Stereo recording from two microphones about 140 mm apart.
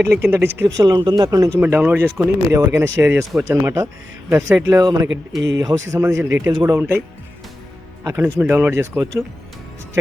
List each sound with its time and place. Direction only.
0.2 s speech: 15° right (ahead or behind)
1.6 s speech: 15° right (ahead or behind)
6.7 s speech: 15° right (ahead or behind)
8.0 s speech: 20° right (ahead or behind)